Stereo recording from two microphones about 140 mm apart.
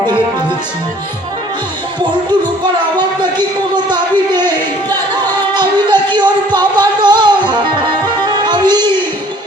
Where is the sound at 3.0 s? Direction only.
30° right (ahead or behind).